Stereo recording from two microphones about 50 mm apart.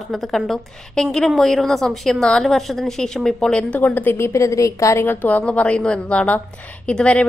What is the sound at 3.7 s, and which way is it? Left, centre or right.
Speech, left.